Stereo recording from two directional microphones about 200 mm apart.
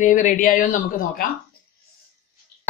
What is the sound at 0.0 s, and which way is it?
Speech, 40° left (ahead or behind).